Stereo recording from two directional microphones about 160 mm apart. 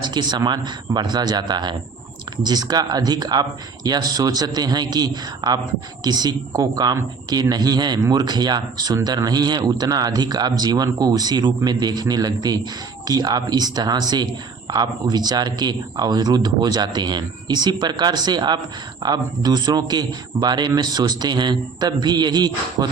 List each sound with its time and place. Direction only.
0.0 s speech: 25° right (ahead or behind)